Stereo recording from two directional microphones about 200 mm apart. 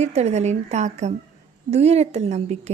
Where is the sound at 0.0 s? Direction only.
35° right (ahead or behind).